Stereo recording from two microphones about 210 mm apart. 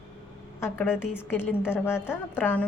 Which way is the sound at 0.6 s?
10° left (ahead or behind).